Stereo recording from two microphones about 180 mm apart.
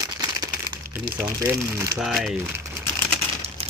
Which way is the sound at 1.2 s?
15° right (ahead or behind).